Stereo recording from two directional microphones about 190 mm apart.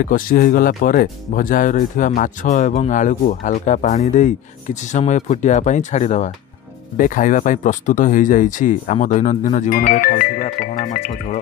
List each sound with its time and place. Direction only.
0.0 s speech: 45° left (ahead or behind)